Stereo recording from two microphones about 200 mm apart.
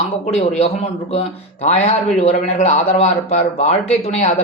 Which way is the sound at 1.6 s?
35° left (ahead or behind).